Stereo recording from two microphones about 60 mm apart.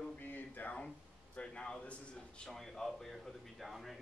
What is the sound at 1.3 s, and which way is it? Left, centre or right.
A man's voice, centre.